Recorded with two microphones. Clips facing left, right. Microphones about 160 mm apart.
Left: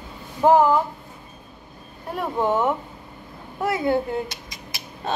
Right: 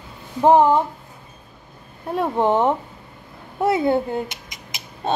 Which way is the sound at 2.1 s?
25° right (ahead or behind).